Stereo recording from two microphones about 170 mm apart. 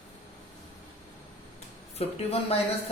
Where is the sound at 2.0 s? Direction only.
35° left (ahead or behind).